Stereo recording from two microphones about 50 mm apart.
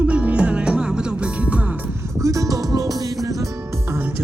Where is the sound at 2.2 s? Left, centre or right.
Right.